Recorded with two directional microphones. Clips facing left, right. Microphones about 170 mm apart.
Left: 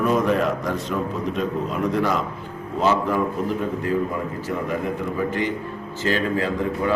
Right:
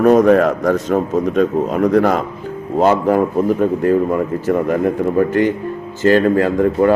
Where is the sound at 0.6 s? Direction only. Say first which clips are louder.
Right 9 dB; 45° right (ahead or behind).